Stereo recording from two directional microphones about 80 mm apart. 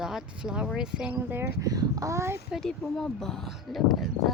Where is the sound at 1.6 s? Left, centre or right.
Right.